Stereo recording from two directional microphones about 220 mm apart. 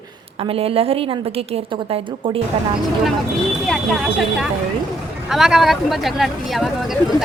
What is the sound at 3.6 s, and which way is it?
Speech, centre (ahead or behind).